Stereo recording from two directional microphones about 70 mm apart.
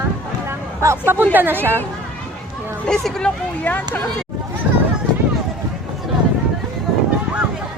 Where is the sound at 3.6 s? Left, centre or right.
Left.